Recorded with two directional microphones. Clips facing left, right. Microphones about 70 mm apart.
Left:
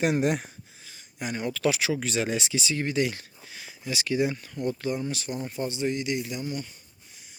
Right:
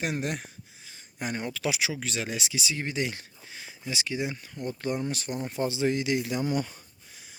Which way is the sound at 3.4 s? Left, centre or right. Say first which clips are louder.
Even; right.